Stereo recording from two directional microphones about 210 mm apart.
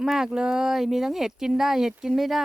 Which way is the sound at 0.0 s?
Centre (ahead or behind).